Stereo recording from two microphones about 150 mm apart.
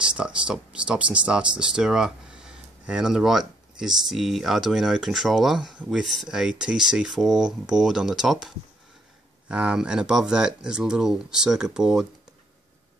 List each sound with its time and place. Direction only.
0.0 s speech: 5° right (ahead or behind)